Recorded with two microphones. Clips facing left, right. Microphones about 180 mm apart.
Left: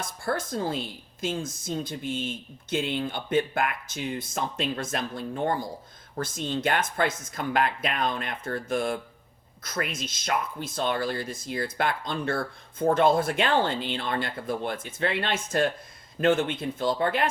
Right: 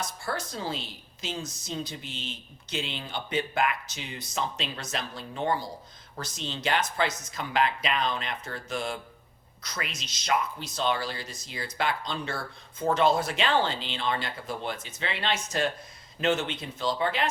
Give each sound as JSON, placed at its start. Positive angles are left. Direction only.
{"t": 0.0, "sound": "speech", "side_deg": 50}